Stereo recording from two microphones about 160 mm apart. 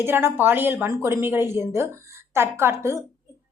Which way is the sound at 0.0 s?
15° right (ahead or behind).